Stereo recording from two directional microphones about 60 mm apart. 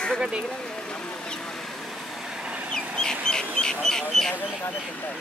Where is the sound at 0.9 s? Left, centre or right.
Centre.